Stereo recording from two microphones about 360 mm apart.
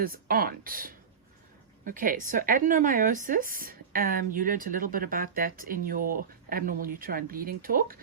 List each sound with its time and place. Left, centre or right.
0.0 s speech: right